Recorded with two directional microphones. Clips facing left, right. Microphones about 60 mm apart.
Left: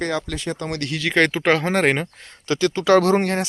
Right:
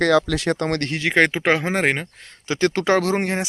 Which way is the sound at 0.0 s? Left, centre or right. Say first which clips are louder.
Right 7 dB; right.